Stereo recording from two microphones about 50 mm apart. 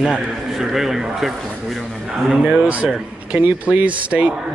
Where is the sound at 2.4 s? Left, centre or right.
Right.